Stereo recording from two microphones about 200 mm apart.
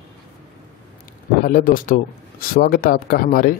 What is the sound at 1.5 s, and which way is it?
A man's voice, 45° left (ahead or behind).